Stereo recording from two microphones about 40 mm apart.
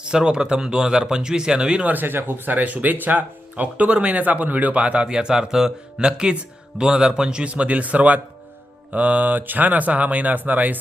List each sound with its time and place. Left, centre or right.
0.0 s speech: right
1.8 s speech: right
2.0 s speech: right
3.5 s speech: right
5.0 s speech: centre; by 10.8 s right